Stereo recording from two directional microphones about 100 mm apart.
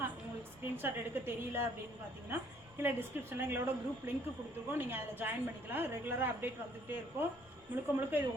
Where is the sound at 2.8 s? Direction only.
20° right (ahead or behind).